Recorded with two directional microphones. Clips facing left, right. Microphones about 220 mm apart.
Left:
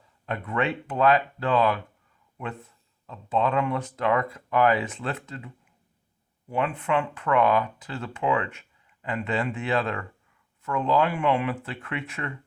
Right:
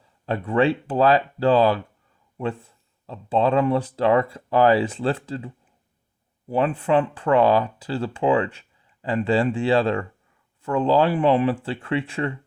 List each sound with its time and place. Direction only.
0.3 s speech: 30° right (ahead or behind)